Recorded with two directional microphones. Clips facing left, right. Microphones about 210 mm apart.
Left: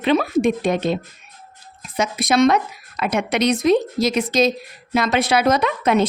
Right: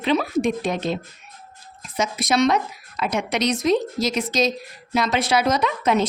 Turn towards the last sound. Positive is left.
turn(degrees=60)  # may be behind; listen again after turning